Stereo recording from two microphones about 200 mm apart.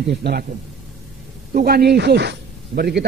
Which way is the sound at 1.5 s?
50° right (ahead or behind).